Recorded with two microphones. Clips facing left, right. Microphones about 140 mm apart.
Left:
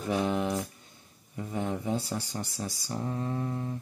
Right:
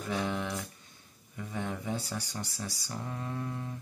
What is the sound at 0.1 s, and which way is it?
Speech, 30° left (ahead or behind).